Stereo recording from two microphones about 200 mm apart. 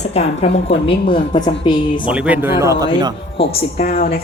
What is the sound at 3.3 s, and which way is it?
Speech, 30° left (ahead or behind).